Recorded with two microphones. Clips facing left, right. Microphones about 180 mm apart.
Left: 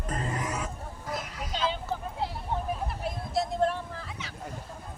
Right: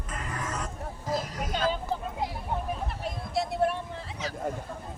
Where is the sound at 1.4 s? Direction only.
50° right (ahead or behind).